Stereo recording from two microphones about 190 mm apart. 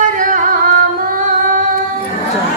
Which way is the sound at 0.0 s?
45° right (ahead or behind).